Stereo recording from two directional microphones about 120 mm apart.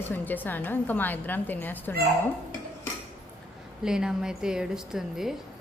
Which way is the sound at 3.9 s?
5° right (ahead or behind).